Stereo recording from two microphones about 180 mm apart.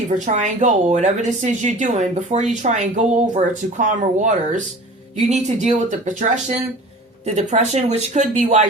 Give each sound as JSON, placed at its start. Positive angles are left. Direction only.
{"t": 0.3, "sound": "a woman's voice", "side_deg": -40}